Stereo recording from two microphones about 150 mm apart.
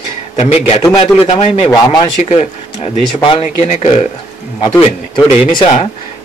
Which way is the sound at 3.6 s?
50° left (ahead or behind).